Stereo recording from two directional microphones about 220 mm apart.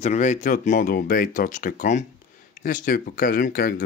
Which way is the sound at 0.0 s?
30° left (ahead or behind).